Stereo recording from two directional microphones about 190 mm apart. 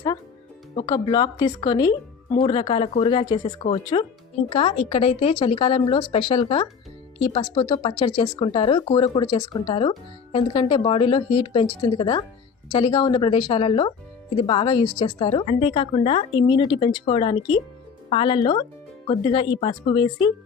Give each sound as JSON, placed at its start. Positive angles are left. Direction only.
{"t": 0.9, "sound": "a woman's voice", "side_deg": 20}